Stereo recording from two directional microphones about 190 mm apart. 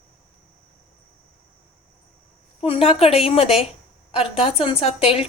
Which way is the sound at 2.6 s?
30° left (ahead or behind).